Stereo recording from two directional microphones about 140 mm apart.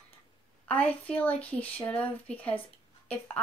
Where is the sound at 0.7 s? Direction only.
10° left (ahead or behind).